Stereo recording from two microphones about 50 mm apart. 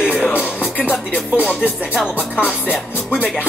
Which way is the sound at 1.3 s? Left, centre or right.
Right.